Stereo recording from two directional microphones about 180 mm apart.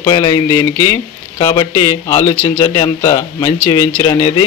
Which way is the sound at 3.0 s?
15° left (ahead or behind).